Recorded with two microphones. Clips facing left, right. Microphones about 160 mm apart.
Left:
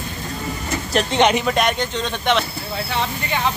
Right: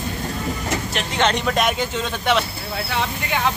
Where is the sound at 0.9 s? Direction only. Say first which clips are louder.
Left 7 dB; 40° left (ahead or behind).